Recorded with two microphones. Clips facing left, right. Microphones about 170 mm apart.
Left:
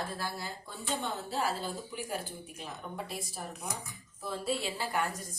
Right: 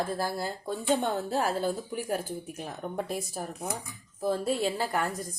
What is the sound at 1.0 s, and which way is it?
A woman's voice, 50° right (ahead or behind).